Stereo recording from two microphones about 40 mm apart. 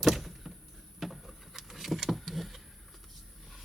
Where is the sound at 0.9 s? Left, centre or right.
Centre.